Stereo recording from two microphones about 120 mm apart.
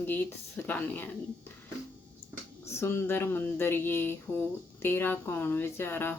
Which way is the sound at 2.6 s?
20° left (ahead or behind).